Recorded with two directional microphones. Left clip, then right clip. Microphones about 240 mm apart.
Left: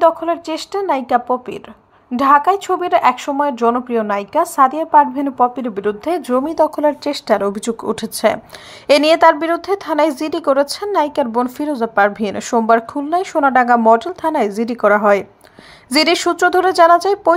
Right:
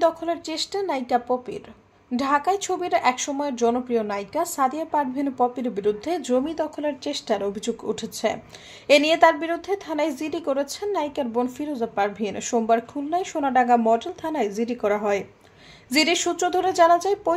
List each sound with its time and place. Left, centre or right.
0.0 s speech: centre